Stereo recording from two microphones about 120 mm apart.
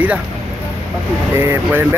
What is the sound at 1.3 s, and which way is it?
Speech, 20° right (ahead or behind).